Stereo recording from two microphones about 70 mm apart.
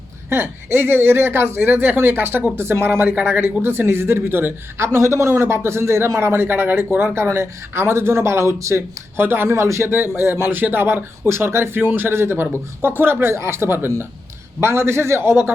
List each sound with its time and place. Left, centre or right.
0.3 s speech: right
9.1 s speech: right
11.8 s speech: right
12.1 s speech: right